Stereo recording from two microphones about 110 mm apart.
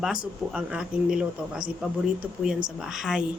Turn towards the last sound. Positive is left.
turn(degrees=-5)  # may be behind; listen again after turning